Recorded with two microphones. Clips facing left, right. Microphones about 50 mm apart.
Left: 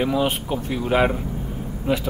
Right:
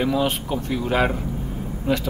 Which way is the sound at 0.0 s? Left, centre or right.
Centre.